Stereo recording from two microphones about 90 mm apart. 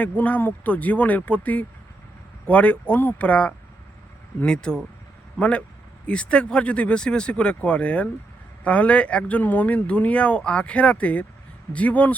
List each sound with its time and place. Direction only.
0.0 s speech: 15° left (ahead or behind)